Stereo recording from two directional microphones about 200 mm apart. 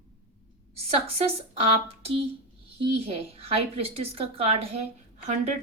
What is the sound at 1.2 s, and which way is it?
A woman's voice, 30° right (ahead or behind).